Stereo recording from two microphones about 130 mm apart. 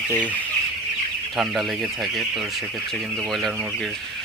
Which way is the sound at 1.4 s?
Centre (ahead or behind).